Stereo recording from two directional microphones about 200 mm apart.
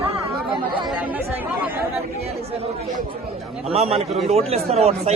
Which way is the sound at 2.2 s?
30° right (ahead or behind).